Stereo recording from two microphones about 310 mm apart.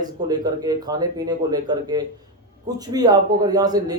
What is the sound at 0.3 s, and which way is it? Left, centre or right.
A man's voice, centre.